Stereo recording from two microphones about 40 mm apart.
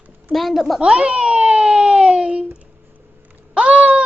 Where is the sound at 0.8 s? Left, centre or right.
Right.